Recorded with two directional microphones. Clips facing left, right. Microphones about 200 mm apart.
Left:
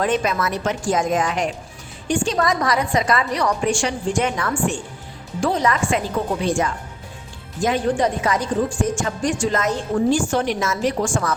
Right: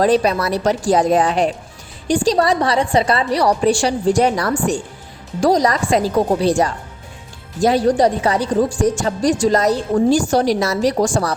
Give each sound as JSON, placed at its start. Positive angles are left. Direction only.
{"t": 0.0, "sound": "a woman's voice", "side_deg": -35}